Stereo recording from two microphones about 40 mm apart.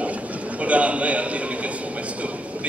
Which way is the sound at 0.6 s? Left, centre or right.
Right.